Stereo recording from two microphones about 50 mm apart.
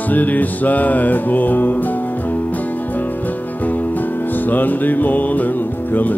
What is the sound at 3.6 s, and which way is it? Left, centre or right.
Music, left.